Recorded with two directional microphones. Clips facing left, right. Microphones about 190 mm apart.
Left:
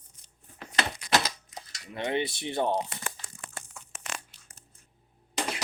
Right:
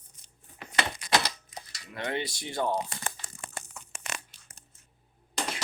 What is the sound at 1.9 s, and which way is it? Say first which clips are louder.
Speech: left 3 dB; 20° left (ahead or behind).